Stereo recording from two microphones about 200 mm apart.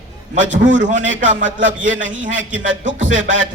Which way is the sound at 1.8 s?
70° right (ahead or behind).